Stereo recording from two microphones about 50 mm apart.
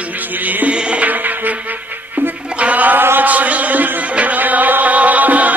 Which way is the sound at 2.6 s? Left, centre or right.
Right.